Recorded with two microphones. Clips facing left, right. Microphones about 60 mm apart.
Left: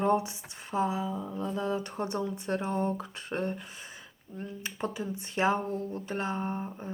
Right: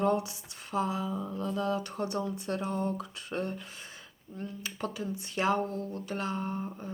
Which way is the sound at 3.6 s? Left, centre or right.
Centre.